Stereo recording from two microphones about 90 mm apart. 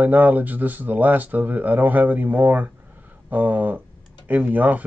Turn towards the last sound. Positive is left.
turn(degrees=-15)  # may be behind; listen again after turning